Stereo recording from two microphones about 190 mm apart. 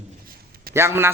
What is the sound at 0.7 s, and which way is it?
Speech, 15° right (ahead or behind).